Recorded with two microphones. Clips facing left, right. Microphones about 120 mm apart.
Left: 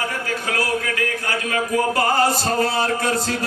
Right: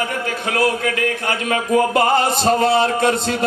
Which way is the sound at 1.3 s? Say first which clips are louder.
Right 4 dB; 20° right (ahead or behind).